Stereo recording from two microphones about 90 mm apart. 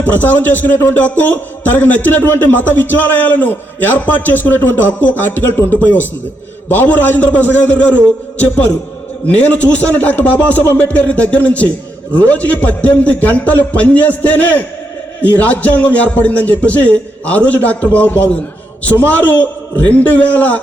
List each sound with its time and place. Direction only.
0.1 s a man's voice: 20° left (ahead or behind)